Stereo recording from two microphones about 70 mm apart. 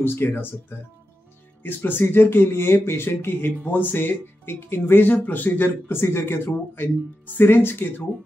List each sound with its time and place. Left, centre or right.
0.0 s speech: left